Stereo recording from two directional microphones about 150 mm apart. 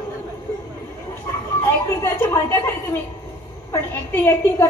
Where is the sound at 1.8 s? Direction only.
15° left (ahead or behind).